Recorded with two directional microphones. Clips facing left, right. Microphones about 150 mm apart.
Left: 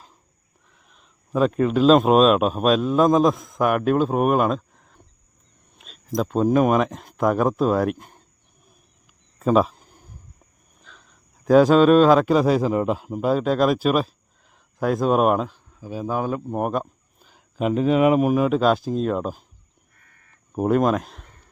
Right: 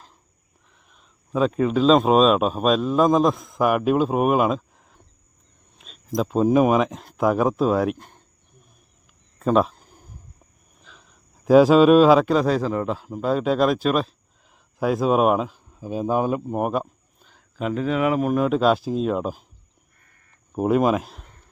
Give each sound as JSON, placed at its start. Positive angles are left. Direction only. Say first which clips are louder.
{"t": 0.9, "sound": "speech", "louder": "even", "side_deg": 0}
{"t": 9.4, "sound": "a sound", "louder": "left 1 dB", "side_deg": 0}
{"t": 10.8, "sound": "a man's voice", "louder": "even", "side_deg": 0}
{"t": 13.3, "sound": "speech", "louder": "even", "side_deg": 0}
{"t": 15.7, "sound": "speech", "louder": "right 4 dB", "side_deg": -20}
{"t": 16.5, "sound": "a sound", "louder": "even", "side_deg": -5}
{"t": 17.6, "sound": "speech", "louder": "left 4 dB", "side_deg": 20}
{"t": 18.3, "sound": "speech", "louder": "left 1 dB", "side_deg": 5}
{"t": 20.6, "sound": "speech", "louder": "even", "side_deg": -5}